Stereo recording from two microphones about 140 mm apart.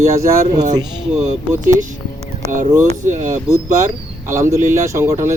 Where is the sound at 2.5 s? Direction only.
60° right (ahead or behind).